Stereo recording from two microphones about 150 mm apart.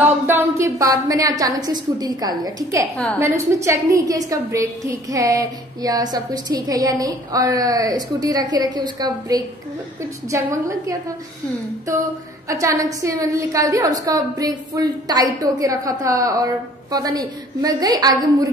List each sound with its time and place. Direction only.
0.3 s a woman's voice: 15° right (ahead or behind)